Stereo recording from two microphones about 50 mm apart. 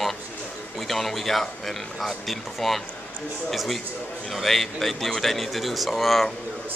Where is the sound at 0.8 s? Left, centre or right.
Centre.